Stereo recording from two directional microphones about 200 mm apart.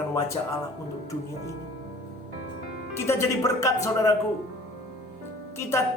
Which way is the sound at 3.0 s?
15° left (ahead or behind).